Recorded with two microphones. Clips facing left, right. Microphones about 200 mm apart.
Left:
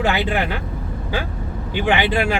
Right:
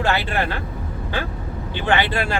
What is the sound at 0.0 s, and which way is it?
Speech, 15° left (ahead or behind).